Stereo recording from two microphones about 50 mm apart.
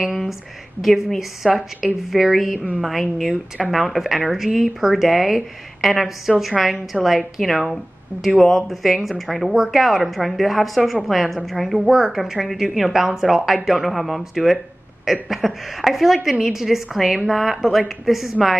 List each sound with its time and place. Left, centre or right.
0.1 s a woman's voice: centre